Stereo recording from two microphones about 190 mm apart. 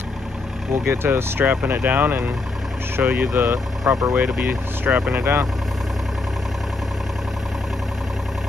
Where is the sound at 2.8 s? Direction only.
10° right (ahead or behind).